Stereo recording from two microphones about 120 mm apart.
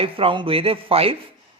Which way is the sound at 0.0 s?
50° right (ahead or behind).